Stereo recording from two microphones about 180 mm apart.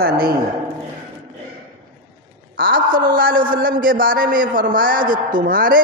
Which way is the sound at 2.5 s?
55° right (ahead or behind).